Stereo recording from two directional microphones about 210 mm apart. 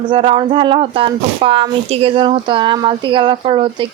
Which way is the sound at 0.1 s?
25° right (ahead or behind).